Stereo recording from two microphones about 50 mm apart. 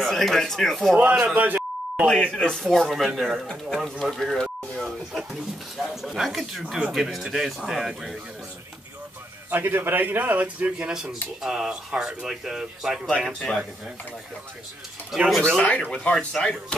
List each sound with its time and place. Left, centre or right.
0.0 s speech: centre
1.3 s beep: right
2.0 s speech: centre
2.6 s speech: centre
4.0 s speech: centre
4.8 s speech: centre
9.5 s a man's voice: right
10.9 s speech: centre
13.3 s speech: centre
15.1 s speech: centre
15.6 s speech: left